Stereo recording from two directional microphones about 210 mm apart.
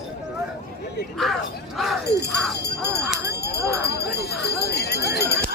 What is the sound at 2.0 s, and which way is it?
Speech, 50° left (ahead or behind).